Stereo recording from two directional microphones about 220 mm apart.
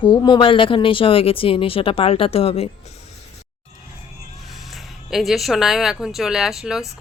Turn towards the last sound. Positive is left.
turn(degrees=0)  # may be behind; listen again after turning